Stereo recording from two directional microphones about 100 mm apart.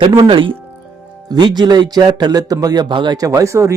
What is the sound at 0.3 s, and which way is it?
Speech, 60° right (ahead or behind).